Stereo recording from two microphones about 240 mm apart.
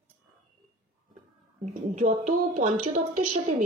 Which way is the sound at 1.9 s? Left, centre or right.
Right.